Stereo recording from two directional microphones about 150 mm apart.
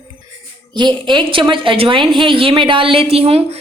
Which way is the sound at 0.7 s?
30° right (ahead or behind).